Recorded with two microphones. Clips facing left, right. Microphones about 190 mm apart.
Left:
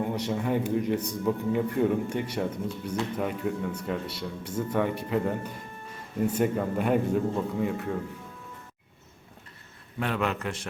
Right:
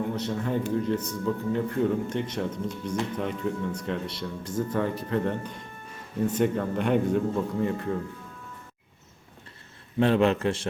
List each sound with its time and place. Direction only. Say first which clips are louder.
0.1 s a man's voice: left 1 dB; 15° left (ahead or behind)
10.0 s a man's voice: right 7 dB; 30° right (ahead or behind)